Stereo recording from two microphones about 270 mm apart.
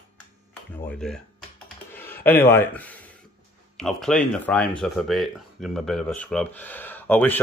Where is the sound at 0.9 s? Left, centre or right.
Centre.